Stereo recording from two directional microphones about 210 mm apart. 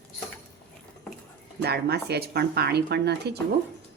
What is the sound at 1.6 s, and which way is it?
Speech, 50° right (ahead or behind).